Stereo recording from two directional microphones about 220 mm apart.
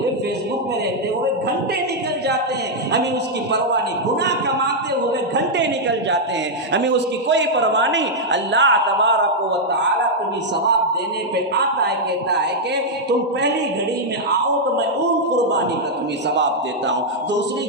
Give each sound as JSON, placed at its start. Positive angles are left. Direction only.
{"t": 4.2, "sound": "a woman's voice", "side_deg": -50}